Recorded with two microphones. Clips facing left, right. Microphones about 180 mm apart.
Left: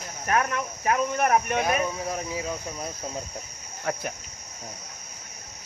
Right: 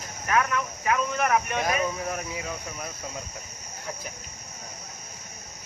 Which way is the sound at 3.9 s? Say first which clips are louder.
Left 8 dB; 70° left (ahead or behind).